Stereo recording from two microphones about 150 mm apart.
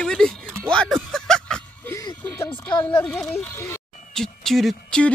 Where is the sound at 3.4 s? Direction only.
20° left (ahead or behind).